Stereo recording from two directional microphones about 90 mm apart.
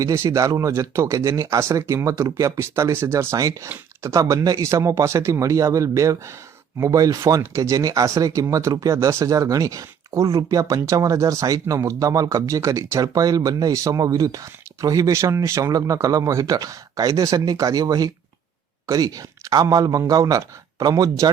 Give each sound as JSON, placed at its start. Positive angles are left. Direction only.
{"t": 0.0, "sound": "a man's voice", "side_deg": -35}